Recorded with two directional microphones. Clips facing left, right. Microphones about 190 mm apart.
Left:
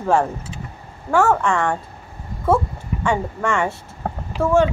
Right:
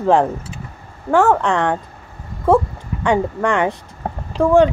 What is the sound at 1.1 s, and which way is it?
Speech, 15° right (ahead or behind).